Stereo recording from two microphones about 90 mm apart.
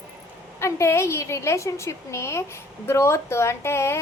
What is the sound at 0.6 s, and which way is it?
A woman's voice, 30° left (ahead or behind).